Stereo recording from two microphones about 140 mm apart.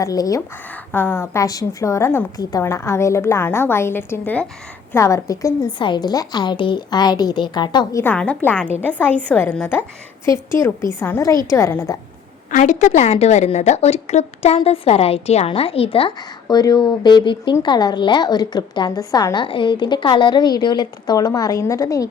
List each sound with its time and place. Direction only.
0.0 s a woman's voice: 25° left (ahead or behind)
0.7 s a woman's voice: 10° left (ahead or behind); by 8.0 s 30° left (ahead or behind)
8.0 s a woman's voice: 10° left (ahead or behind)
10.2 s a woman's voice: 20° left (ahead or behind)
12.5 s a woman's voice: 65° left (ahead or behind); by 22.0 s 25° left (ahead or behind)